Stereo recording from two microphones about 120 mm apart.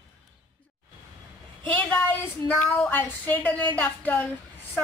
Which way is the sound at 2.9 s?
15° left (ahead or behind).